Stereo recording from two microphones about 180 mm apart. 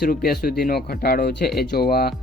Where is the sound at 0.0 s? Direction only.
60° left (ahead or behind).